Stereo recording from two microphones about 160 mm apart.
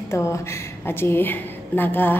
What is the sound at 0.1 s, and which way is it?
A woman's voice, 20° left (ahead or behind).